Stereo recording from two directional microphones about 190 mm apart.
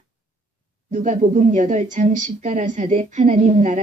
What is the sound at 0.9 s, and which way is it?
Speech, 40° right (ahead or behind).